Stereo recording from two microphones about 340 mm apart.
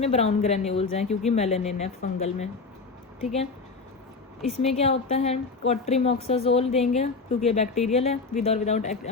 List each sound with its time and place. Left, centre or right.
0.0 s a woman's voice: centre
4.6 s a woman's voice: centre